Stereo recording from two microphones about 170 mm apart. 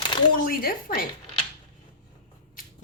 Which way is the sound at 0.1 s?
30° left (ahead or behind).